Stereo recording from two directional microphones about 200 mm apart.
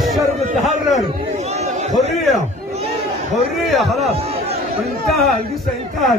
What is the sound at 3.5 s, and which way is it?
Speech, centre (ahead or behind).